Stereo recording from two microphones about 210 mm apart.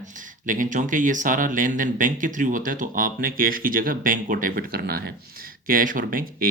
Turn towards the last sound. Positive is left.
turn(degrees=-40)  # may be behind; listen again after turning